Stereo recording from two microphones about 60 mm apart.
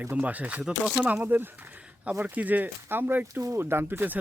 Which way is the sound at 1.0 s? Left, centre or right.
Right.